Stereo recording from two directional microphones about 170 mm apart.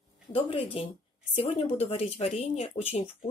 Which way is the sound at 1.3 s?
35° left (ahead or behind).